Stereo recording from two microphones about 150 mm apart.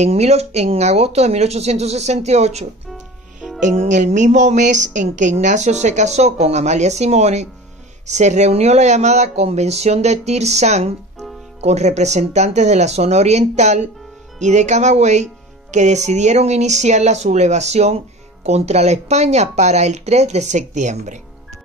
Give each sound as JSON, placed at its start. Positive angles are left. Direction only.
{"t": 0.0, "sound": "speech", "side_deg": -45}